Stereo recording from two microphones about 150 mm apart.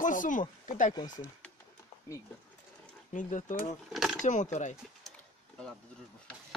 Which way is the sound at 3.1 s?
60° left (ahead or behind).